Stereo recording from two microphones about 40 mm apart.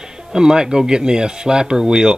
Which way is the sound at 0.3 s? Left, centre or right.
Centre.